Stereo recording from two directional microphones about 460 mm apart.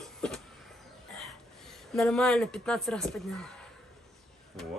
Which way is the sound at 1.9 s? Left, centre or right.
Centre.